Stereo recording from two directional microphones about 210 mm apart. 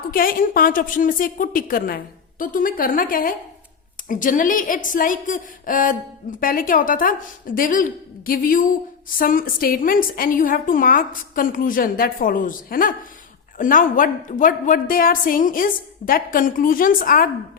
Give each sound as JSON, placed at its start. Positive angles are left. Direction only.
{"t": 0.1, "sound": "a woman's voice", "side_deg": 45}